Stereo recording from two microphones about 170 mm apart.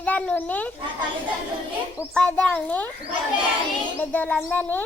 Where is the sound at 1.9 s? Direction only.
5° left (ahead or behind).